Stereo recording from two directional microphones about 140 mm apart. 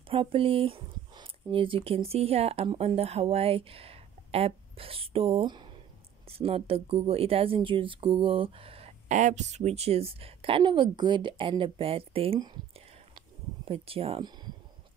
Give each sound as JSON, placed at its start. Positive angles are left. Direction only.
{"t": 0.1, "sound": "speech", "side_deg": -40}
{"t": 9.1, "sound": "a woman's voice", "side_deg": -60}
{"t": 13.7, "sound": "speech", "side_deg": -40}